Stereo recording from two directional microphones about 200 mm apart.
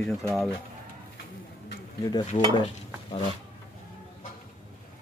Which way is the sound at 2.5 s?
30° left (ahead or behind).